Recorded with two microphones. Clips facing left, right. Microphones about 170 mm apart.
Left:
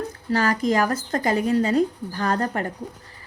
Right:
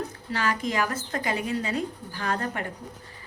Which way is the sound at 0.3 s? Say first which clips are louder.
Left 7 dB; 40° left (ahead or behind).